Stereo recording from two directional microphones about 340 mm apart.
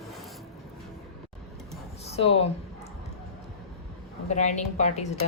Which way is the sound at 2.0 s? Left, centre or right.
Centre.